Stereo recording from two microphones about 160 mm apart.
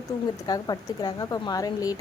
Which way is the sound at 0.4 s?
25° left (ahead or behind).